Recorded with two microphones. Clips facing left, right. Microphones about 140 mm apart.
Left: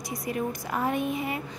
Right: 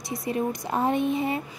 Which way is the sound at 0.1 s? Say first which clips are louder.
Right 3 dB; 25° right (ahead or behind).